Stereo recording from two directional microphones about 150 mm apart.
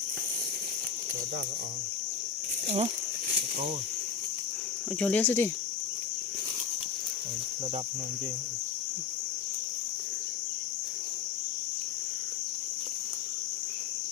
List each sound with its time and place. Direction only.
4.9 s speech: 10° left (ahead or behind)